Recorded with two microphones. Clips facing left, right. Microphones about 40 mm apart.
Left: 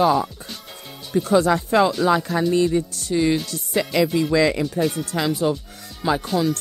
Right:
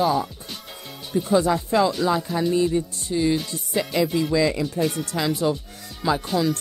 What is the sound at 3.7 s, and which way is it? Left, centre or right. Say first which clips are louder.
Speech: left 2 dB; left.